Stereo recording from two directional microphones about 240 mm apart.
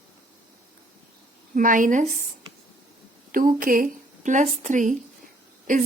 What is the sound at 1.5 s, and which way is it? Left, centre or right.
Speech, right.